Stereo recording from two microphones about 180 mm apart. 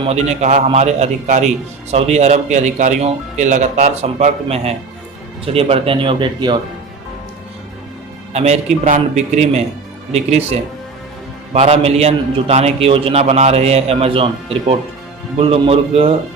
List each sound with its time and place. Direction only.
0.0 s speech: 35° right (ahead or behind)
8.3 s speech: 40° right (ahead or behind)
15.4 s speech: 30° right (ahead or behind)